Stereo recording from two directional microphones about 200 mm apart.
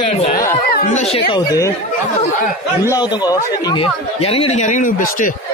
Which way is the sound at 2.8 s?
20° left (ahead or behind).